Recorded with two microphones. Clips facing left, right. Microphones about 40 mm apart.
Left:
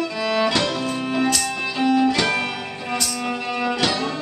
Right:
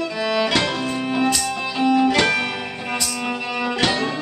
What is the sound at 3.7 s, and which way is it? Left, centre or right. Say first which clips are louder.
Music: right 4 dB; right.